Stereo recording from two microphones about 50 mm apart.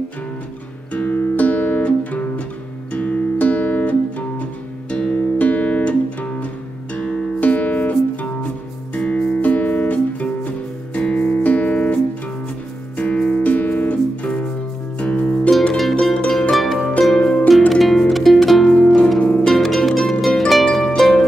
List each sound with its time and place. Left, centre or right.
0.9 s music: left
5.4 s guitar: left
7.0 s music: left
13.4 s music: left
15.7 s music: centre
17.1 s harp: centre
17.5 s music: centre
19.1 s harp: centre
19.5 s music: centre
20.3 s harp: centre